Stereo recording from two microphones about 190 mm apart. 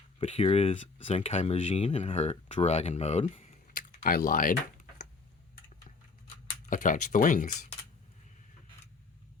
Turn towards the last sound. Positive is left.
turn(degrees=40)  # may be behind; listen again after turning